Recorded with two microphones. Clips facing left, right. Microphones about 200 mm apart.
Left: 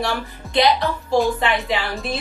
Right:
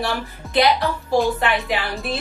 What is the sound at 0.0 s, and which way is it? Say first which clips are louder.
A woman's voice: left 1 dB; centre (ahead or behind).